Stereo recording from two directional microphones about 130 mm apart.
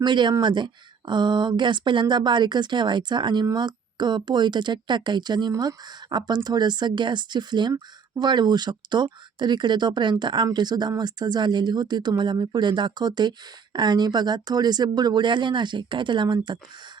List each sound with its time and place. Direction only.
0.0 s speech: 35° right (ahead or behind)